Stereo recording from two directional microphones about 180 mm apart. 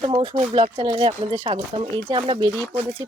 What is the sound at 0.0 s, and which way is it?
Speech, 25° right (ahead or behind).